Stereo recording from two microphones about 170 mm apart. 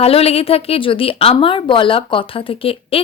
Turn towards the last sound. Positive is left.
turn(degrees=35)  # may be behind; listen again after turning